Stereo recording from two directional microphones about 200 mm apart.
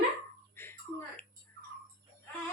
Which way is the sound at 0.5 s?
10° left (ahead or behind).